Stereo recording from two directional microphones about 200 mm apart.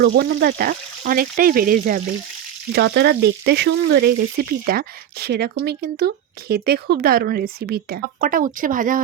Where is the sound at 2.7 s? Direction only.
55° right (ahead or behind).